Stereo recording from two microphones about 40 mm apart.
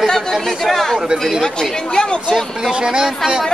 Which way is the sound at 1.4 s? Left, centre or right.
Centre.